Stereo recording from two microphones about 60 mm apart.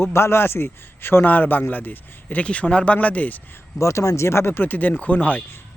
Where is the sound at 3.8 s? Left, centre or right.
Left.